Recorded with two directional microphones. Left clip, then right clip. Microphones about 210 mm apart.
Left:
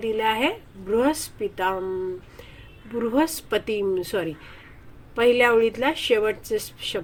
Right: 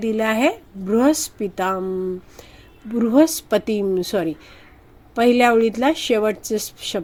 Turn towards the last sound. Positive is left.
turn(degrees=-45)  # may be behind; listen again after turning